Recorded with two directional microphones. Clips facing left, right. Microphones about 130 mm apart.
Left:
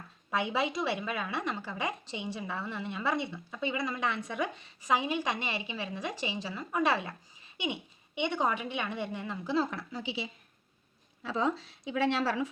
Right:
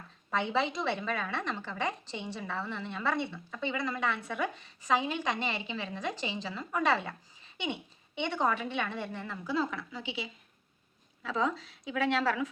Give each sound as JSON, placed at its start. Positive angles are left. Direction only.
{"t": 0.3, "sound": "a woman's voice", "side_deg": 10}
{"t": 9.6, "sound": "a woman's voice", "side_deg": 40}